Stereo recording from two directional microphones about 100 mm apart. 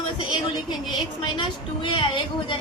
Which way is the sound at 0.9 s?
50° left (ahead or behind).